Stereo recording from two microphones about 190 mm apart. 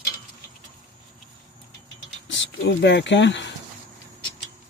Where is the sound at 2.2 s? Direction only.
75° left (ahead or behind).